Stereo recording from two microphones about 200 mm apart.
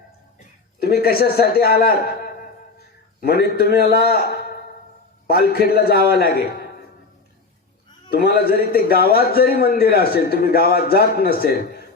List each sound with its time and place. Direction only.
0.8 s a man's voice: 50° left (ahead or behind)
8.1 s a man's voice: 50° left (ahead or behind)